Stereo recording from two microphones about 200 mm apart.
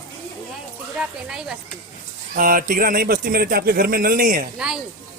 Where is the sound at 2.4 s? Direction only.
45° right (ahead or behind).